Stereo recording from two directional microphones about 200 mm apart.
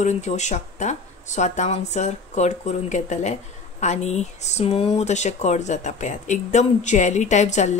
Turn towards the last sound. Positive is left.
turn(degrees=35)  # may be behind; listen again after turning